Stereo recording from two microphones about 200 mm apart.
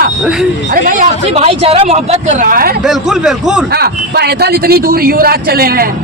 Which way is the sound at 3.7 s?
50° right (ahead or behind).